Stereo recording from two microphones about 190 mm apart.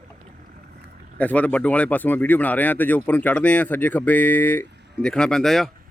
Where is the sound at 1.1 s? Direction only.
10° left (ahead or behind).